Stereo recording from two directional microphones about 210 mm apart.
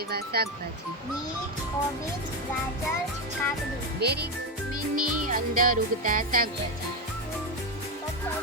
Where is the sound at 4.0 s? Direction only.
50° right (ahead or behind).